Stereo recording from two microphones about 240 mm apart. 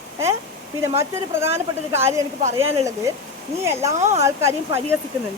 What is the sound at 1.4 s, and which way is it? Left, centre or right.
Speech, centre.